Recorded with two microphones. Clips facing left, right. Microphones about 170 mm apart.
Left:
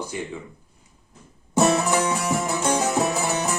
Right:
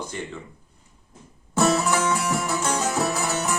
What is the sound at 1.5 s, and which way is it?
Music, 15° left (ahead or behind).